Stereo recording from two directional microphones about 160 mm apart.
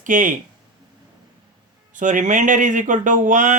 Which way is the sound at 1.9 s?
55° right (ahead or behind).